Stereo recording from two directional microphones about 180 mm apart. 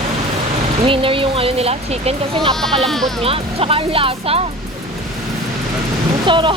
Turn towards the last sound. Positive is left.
turn(degrees=-25)  # may be behind; listen again after turning